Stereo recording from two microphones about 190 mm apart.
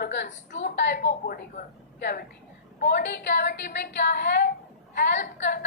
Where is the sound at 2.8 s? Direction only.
60° left (ahead or behind).